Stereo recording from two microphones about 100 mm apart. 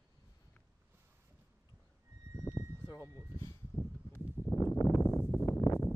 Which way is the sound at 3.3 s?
30° left (ahead or behind).